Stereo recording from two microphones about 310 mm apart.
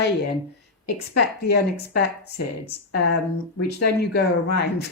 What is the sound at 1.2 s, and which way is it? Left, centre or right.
Speech, left.